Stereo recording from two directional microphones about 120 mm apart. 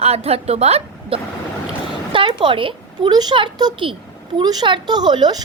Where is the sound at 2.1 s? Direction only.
45° right (ahead or behind).